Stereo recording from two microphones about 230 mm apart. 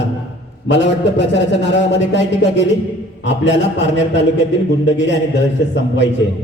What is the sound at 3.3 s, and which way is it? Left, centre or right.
A man's voice, left.